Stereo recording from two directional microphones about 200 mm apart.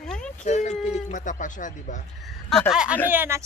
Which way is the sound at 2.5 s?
Centre (ahead or behind).